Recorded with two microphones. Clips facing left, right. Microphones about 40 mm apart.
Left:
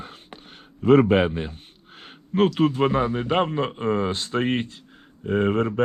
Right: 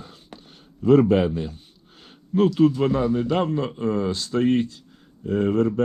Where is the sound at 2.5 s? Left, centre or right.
Left.